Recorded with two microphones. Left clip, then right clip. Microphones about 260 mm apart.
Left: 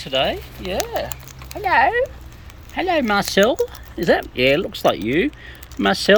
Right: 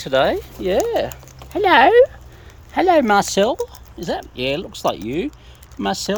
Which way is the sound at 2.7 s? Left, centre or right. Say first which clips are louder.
Right 5 dB; centre.